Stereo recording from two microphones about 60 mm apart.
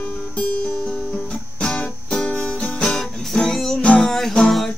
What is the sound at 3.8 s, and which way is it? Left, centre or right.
Music, left.